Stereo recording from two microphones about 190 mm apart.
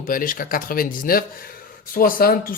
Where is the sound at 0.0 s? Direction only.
45° left (ahead or behind).